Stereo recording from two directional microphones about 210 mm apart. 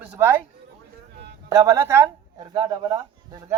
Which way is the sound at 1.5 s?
15° right (ahead or behind).